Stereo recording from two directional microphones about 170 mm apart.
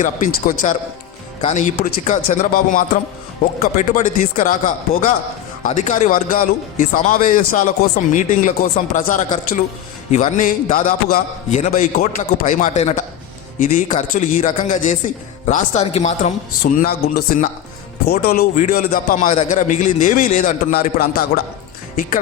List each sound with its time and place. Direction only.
0.0 s speech: 50° left (ahead or behind)